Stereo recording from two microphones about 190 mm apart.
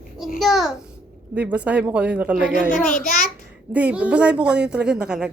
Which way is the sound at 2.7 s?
45° left (ahead or behind).